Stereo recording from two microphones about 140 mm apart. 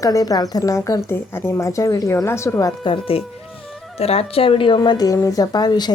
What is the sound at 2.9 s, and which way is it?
A woman's voice, 40° left (ahead or behind).